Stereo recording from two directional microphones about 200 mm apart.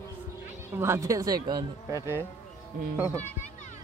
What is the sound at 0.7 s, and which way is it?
Speech, 15° right (ahead or behind).